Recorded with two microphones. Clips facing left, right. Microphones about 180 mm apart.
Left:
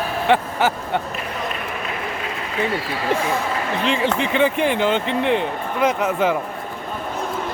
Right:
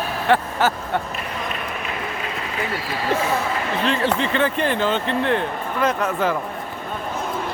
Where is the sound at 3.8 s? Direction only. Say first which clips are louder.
Even; 15° left (ahead or behind).